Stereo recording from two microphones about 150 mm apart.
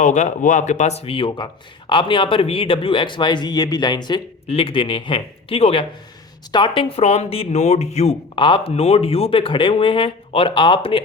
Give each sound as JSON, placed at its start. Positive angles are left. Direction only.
{"t": 0.0, "sound": "speech", "side_deg": 55}
{"t": 4.4, "sound": "speech", "side_deg": 40}
{"t": 8.4, "sound": "speech", "side_deg": 35}